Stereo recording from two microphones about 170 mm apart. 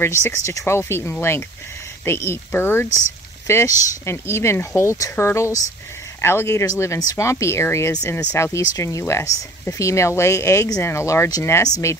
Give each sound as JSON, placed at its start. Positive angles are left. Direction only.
{"t": 0.0, "sound": "speech", "side_deg": 15}